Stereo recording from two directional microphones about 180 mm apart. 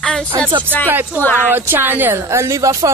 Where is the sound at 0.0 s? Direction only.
5° left (ahead or behind).